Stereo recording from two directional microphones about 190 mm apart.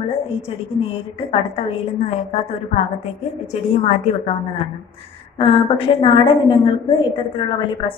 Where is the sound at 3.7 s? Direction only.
35° left (ahead or behind).